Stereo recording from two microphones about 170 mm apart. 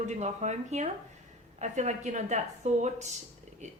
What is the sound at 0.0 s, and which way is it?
A woman's voice, 40° right (ahead or behind).